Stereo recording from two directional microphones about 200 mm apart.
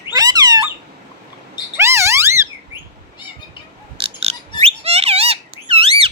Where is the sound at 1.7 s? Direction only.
15° right (ahead or behind).